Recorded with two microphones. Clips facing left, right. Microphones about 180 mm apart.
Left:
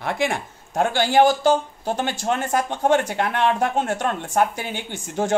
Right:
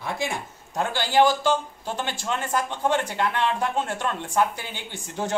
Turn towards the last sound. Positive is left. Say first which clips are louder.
# left 5 dB
turn(degrees=50)  # may be behind; listen again after turning